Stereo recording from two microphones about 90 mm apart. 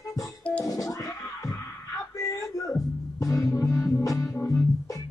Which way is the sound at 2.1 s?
40° left (ahead or behind).